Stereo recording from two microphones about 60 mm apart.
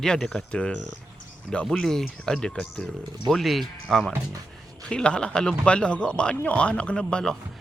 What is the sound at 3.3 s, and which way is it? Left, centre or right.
Speech, centre.